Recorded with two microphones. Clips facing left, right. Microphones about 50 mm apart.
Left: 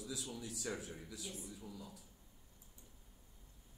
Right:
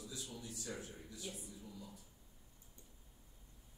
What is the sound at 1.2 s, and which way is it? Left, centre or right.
Speech, centre.